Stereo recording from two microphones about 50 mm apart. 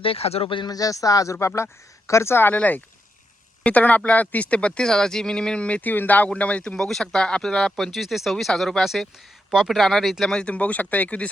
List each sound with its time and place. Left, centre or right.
0.9 s speech: left
2.5 s speech: left
5.8 s speech: left
6.3 s speech: left
6.7 s speech: centre
9.7 s speech: centre
10.2 s speech: centre